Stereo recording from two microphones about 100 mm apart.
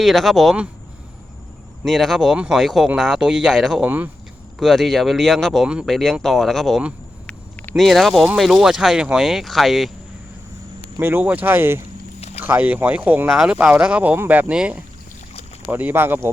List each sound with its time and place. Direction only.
0.0 s speech: centre (ahead or behind)
1.8 s speech: centre (ahead or behind)
3.8 s speech: 15° right (ahead or behind)
4.6 s speech: centre (ahead or behind)
5.6 s speech: 10° right (ahead or behind)
5.9 s speech: 5° left (ahead or behind)
11.0 s speech: 15° right (ahead or behind)